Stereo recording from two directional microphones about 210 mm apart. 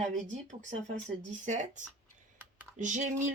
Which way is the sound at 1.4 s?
35° right (ahead or behind).